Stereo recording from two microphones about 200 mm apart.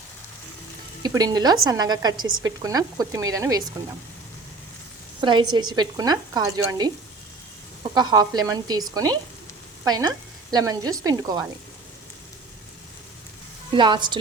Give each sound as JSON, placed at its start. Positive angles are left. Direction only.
{"t": 1.0, "sound": "speech", "side_deg": -20}
{"t": 5.2, "sound": "speech", "side_deg": -25}
{"t": 7.9, "sound": "speech", "side_deg": -20}
{"t": 9.8, "sound": "speech", "side_deg": -20}
{"t": 13.7, "sound": "speech", "side_deg": -25}